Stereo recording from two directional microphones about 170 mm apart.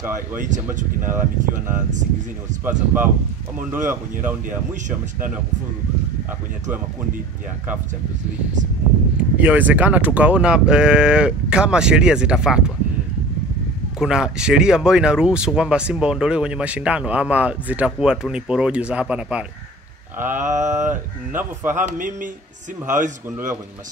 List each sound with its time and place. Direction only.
0.7 s speech: 15° right (ahead or behind)
9.1 s speech: 10° right (ahead or behind)
13.9 s speech: 5° right (ahead or behind)
21.7 s speech: 50° right (ahead or behind)